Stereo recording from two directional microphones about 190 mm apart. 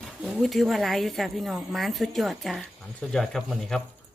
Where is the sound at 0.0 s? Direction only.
Centre (ahead or behind).